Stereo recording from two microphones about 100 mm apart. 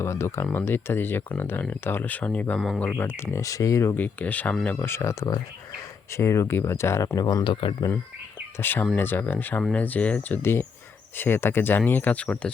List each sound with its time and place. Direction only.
0.0 s speech: 30° left (ahead or behind)
2.6 s speech: 5° left (ahead or behind)
2.8 s speech: 20° left (ahead or behind)
3.3 s speech: 35° left (ahead or behind)
3.9 s speech: 15° left (ahead or behind)
7.2 s speech: 45° left (ahead or behind)
8.5 s speech: 20° left (ahead or behind)